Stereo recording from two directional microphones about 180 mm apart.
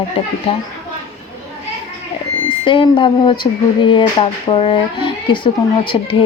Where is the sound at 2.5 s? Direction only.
25° left (ahead or behind).